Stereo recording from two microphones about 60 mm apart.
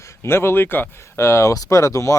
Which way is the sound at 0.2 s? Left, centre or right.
Left.